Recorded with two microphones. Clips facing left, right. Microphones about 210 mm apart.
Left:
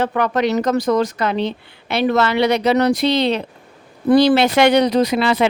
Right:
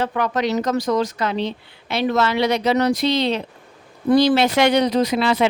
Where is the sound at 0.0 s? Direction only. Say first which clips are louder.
Left 3 dB; 60° left (ahead or behind).